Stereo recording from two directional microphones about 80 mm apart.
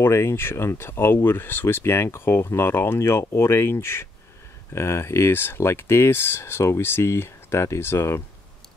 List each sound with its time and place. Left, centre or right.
0.0 s speech: left